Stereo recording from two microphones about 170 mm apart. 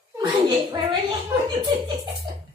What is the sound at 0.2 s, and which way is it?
Speech, 25° right (ahead or behind).